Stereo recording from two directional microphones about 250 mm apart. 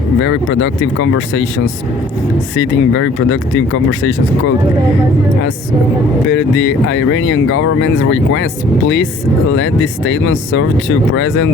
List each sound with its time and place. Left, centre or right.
0.2 s speech: left
2.6 s speech: left
6.2 s speech: left
9.5 s speech: left